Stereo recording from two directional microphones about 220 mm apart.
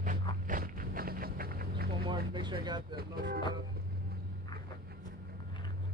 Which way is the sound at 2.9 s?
45° right (ahead or behind).